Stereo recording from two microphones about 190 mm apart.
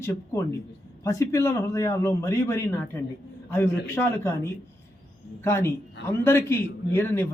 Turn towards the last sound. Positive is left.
turn(degrees=10)  # may be behind; listen again after turning